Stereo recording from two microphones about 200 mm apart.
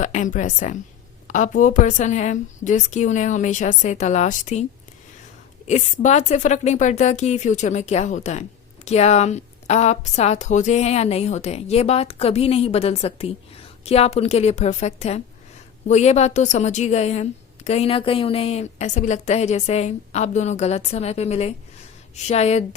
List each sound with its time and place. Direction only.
0.0 s a woman's voice: 35° left (ahead or behind)
5.6 s a woman's voice: 35° left (ahead or behind)